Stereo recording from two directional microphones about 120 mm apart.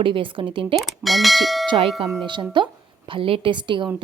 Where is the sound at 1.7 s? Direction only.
50° right (ahead or behind).